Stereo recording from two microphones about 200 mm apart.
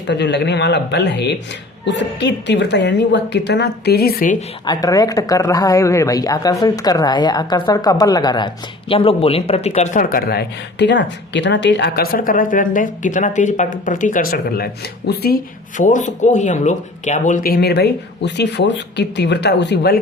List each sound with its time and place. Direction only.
0.1 s speech: 60° left (ahead or behind); by 4.4 s 40° left (ahead or behind)
4.6 s speech: 20° left (ahead or behind); by 15.4 s 50° left (ahead or behind)
15.8 s speech: 40° left (ahead or behind); by 20.0 s 55° left (ahead or behind)